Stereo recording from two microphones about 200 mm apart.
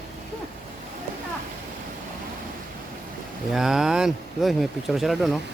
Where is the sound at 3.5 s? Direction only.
Centre (ahead or behind).